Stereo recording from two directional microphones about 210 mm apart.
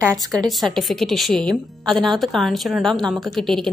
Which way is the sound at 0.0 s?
15° right (ahead or behind).